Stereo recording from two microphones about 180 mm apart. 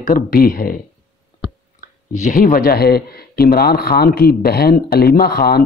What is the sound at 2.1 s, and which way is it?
Speech, 45° left (ahead or behind).